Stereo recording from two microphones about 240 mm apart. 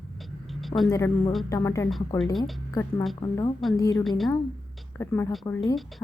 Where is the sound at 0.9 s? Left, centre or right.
Centre.